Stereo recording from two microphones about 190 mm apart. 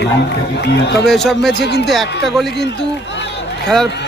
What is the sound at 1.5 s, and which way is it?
Speech, 60° left (ahead or behind).